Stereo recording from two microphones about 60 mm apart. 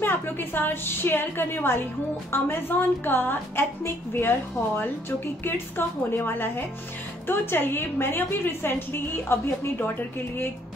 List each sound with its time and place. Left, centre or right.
0.0 s a woman's voice: left